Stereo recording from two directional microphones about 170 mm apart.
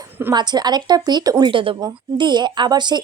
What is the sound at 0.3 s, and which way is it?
Speech, 25° right (ahead or behind).